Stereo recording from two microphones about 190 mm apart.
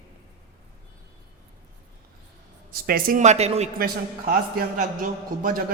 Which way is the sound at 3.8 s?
50° right (ahead or behind).